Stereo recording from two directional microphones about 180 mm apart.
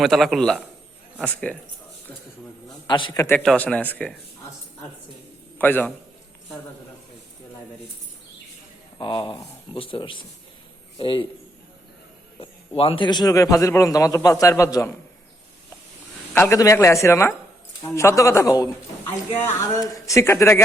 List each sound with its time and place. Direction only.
0.0 s a man's voice: centre (ahead or behind)
2.8 s a man's voice: 25° left (ahead or behind)
3.4 s speech: 5° left (ahead or behind)
5.5 s speech: 10° left (ahead or behind)
9.0 s a man's voice: 25° left (ahead or behind)
12.4 s a man's voice: 30° left (ahead or behind); by 14.9 s 15° left (ahead or behind)
16.3 s speech: 15° left (ahead or behind)